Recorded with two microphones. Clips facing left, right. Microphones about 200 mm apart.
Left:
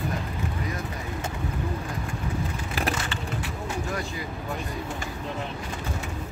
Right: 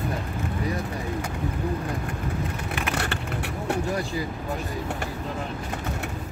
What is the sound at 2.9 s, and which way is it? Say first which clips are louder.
Vehicle: right 3 dB; 65° right (ahead or behind).